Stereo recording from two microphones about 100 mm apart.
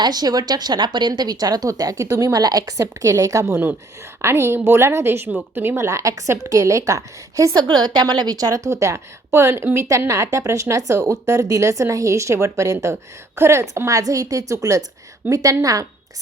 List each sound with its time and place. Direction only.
0.0 s speech: 40° right (ahead or behind)
3.4 s a woman's voice: 25° right (ahead or behind)